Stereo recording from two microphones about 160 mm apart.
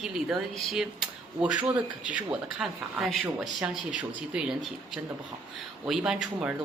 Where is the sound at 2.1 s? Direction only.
5° right (ahead or behind).